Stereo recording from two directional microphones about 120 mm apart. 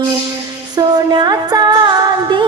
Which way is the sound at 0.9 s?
35° right (ahead or behind).